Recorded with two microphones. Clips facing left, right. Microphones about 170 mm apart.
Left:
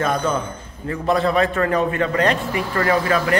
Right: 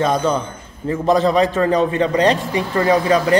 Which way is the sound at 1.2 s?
20° right (ahead or behind).